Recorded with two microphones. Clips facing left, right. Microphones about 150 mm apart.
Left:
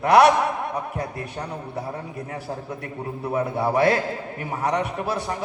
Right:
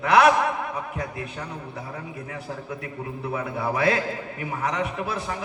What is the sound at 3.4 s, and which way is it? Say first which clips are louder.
A man's voice: left 6 dB; 30° left (ahead or behind).